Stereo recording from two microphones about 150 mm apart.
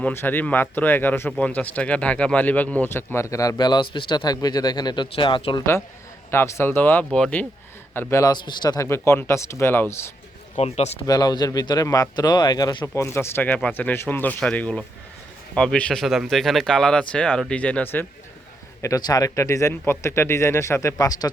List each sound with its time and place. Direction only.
0.0 s speech: 15° left (ahead or behind); by 5.6 s 35° left (ahead or behind)
6.3 s speech: 15° left (ahead or behind)
7.9 s speech: 20° left (ahead or behind)
10.6 s speech: 45° left (ahead or behind)
11.0 s speech: 25° left (ahead or behind); by 18.0 s 10° left (ahead or behind)
18.8 s speech: 25° left (ahead or behind)